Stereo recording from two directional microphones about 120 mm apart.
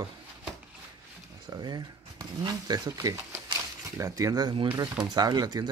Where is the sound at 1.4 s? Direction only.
35° right (ahead or behind).